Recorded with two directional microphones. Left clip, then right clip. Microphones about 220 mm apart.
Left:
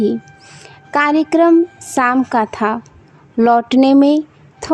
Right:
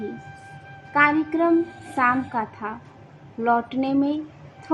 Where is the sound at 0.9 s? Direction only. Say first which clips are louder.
Left 6 dB; 55° left (ahead or behind).